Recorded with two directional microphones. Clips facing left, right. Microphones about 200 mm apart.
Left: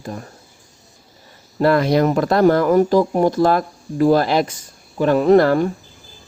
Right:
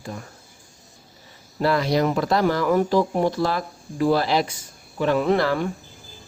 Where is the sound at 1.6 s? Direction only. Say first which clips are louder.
Left 5 dB; 55° left (ahead or behind).